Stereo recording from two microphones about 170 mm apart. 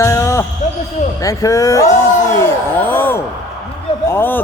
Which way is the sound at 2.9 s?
10° left (ahead or behind).